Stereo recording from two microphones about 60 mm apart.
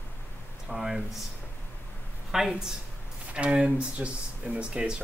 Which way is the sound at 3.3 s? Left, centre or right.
Centre.